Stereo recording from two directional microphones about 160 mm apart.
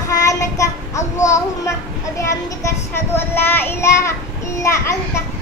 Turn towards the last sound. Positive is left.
turn(degrees=15)  # may be behind; listen again after turning